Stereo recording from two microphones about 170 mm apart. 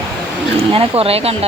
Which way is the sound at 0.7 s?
35° right (ahead or behind).